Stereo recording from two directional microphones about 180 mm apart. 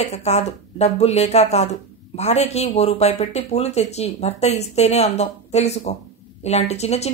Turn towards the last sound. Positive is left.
turn(degrees=35)  # may be behind; listen again after turning